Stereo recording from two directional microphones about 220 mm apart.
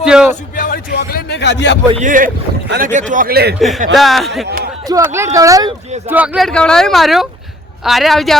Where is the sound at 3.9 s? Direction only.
Centre (ahead or behind).